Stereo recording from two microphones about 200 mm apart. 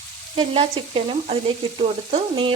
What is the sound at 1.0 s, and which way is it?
Frying, 30° right (ahead or behind).